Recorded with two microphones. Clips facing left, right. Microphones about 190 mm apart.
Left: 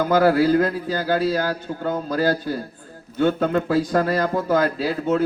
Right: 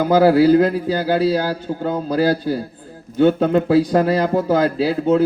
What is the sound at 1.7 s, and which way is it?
Speech, 25° right (ahead or behind).